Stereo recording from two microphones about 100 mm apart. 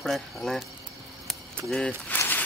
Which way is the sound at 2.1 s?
20° left (ahead or behind).